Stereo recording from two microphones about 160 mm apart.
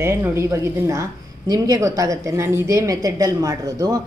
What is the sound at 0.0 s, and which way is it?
A woman's voice, 15° right (ahead or behind).